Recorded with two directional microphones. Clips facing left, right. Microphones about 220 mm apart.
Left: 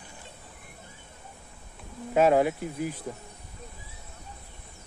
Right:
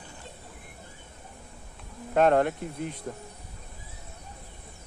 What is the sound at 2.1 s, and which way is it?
Speech, 5° left (ahead or behind).